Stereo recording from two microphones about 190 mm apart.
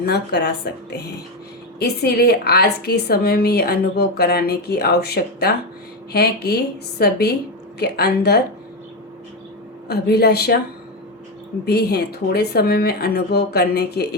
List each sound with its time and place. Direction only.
0.0 s a woman's voice: 60° left (ahead or behind)
9.9 s a woman's voice: 55° left (ahead or behind)
11.6 s a woman's voice: 60° left (ahead or behind)